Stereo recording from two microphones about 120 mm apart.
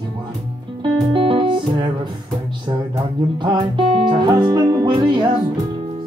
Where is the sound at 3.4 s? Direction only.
40° right (ahead or behind).